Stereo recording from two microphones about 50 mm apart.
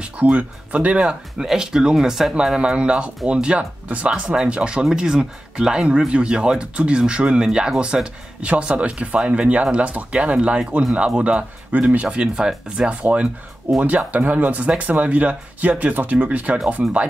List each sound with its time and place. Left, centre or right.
0.0 s speech: right
1.4 s speech: centre; by 12.2 s right
12.2 s speech: centre